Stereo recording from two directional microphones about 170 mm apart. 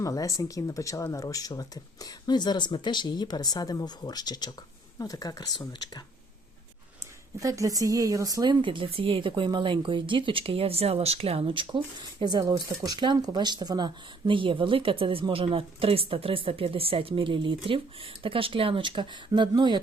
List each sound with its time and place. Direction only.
0.0 s speech: 20° left (ahead or behind)
7.3 s speech: 20° right (ahead or behind)